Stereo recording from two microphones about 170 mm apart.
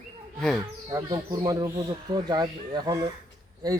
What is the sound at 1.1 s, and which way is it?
A man's voice, 20° right (ahead or behind).